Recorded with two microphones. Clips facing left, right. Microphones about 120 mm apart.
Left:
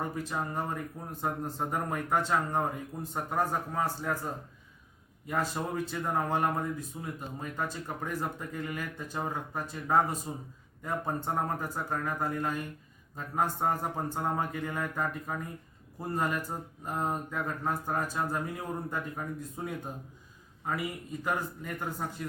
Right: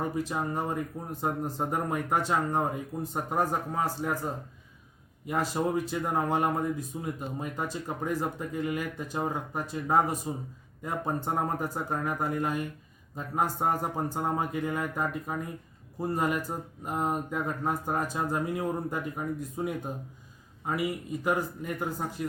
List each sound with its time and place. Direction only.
0.0 s speech: 15° right (ahead or behind)
5.2 s speech: 15° right (ahead or behind)
21.2 s speech: 10° right (ahead or behind)